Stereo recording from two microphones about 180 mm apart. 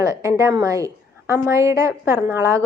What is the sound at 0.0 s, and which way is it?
A woman's voice, 20° right (ahead or behind).